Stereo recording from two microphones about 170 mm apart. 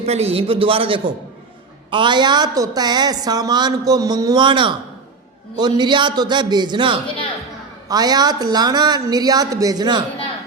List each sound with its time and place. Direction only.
0.0 s a man's voice: 35° right (ahead or behind)